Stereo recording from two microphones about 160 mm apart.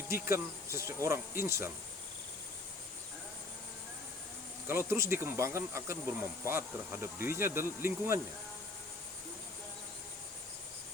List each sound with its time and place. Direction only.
0.1 s speech: 15° right (ahead or behind)
4.6 s speech: 15° right (ahead or behind)